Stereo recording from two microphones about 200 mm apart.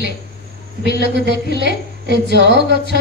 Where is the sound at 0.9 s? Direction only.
50° left (ahead or behind).